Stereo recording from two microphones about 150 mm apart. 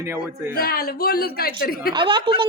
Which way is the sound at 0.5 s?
90° left.